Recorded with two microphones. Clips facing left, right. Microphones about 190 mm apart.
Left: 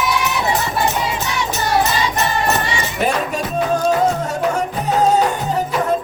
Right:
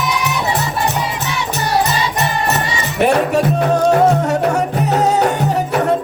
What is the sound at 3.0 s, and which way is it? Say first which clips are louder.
Music: right 8 dB; 65° right (ahead or behind).